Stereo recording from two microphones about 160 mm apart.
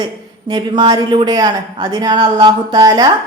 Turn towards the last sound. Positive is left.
turn(degrees=-25)  # may be behind; listen again after turning